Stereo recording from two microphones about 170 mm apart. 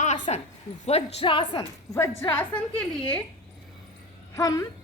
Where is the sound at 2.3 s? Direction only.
10° left (ahead or behind).